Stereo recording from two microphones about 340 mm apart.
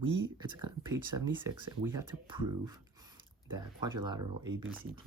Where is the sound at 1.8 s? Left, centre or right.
Centre.